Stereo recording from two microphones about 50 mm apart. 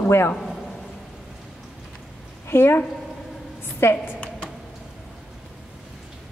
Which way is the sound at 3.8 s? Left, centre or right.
Left.